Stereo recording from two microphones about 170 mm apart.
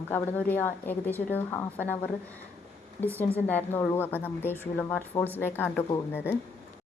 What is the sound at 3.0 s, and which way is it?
A woman's voice, 10° left (ahead or behind).